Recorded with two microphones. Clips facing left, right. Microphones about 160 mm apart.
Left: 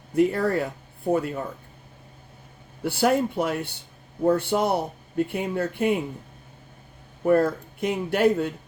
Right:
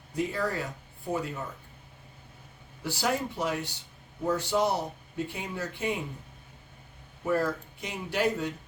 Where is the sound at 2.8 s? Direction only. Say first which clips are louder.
Left 8 dB; 55° left (ahead or behind).